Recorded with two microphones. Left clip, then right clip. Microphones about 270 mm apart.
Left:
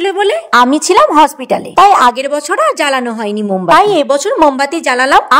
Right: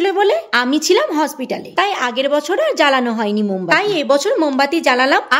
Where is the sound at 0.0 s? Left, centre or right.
Centre.